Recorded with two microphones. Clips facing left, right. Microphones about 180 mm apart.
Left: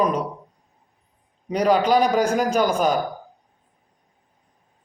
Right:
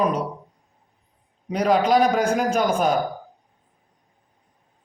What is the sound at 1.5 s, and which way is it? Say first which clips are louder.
Speech: left 1 dB; 5° right (ahead or behind).